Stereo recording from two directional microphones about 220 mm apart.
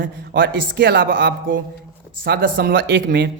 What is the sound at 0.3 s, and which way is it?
Speech, 55° right (ahead or behind).